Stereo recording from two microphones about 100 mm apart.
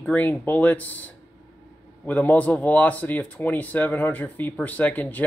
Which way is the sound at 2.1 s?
15° left (ahead or behind).